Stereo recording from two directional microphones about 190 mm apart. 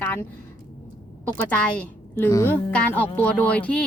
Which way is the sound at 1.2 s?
10° left (ahead or behind).